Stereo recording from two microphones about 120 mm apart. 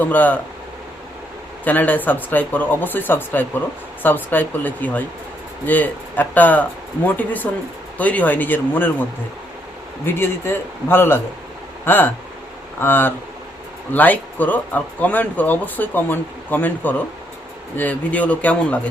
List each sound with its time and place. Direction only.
0.0 s speech: 15° left (ahead or behind)
1.6 s speech: 15° left (ahead or behind)
10.1 s a man's voice: 20° left (ahead or behind)